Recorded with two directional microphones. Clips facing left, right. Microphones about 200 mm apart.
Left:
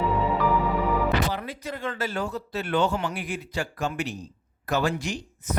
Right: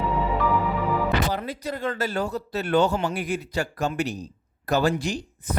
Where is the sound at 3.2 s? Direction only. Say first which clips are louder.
Right 4 dB; 40° right (ahead or behind).